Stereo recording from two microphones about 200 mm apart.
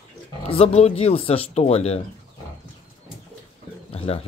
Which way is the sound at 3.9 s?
30° left (ahead or behind).